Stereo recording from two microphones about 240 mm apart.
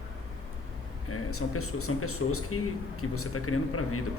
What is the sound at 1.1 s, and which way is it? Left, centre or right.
Speech, left.